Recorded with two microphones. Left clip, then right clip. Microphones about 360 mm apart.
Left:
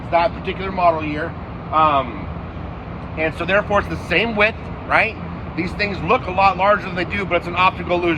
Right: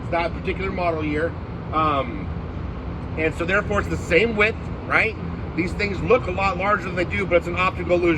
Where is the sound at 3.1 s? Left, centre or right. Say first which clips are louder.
Left 3 dB; centre.